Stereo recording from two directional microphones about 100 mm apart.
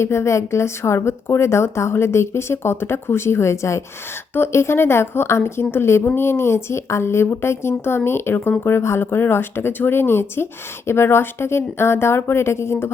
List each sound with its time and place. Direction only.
0.0 s speech: 25° left (ahead or behind)